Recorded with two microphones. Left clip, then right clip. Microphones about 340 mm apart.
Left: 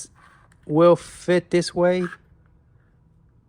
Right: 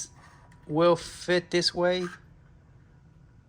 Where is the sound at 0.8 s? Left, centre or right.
Centre.